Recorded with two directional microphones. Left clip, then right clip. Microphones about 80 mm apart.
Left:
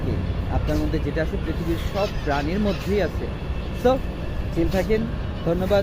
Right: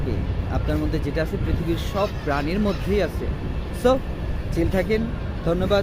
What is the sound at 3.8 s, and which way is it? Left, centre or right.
Speech, right.